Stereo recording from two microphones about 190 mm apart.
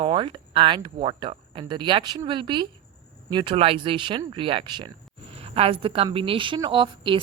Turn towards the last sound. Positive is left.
turn(degrees=-25)  # may be behind; listen again after turning